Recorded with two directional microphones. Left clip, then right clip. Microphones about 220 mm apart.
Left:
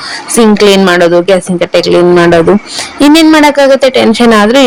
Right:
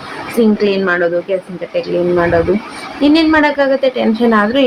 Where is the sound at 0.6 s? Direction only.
50° left (ahead or behind).